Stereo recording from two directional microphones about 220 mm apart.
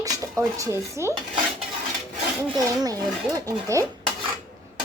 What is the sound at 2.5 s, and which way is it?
Speech, 15° right (ahead or behind).